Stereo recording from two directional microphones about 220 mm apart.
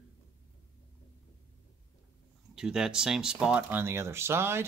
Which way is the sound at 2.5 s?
5° right (ahead or behind).